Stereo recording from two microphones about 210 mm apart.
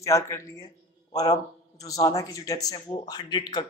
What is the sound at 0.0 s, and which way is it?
A woman's voice, 15° left (ahead or behind).